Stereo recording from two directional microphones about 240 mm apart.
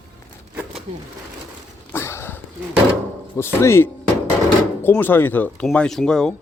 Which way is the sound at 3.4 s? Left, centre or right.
Centre.